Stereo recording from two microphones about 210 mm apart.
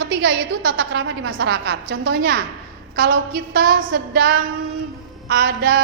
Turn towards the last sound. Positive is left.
turn(degrees=-45)  # may be behind; listen again after turning